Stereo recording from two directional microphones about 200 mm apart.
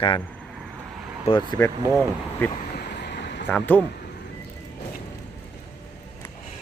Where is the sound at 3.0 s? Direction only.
60° left (ahead or behind).